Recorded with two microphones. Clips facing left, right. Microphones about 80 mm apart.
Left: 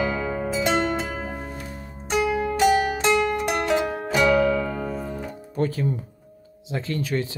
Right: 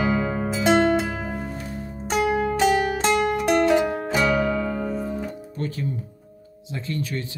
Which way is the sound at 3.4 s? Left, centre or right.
Centre.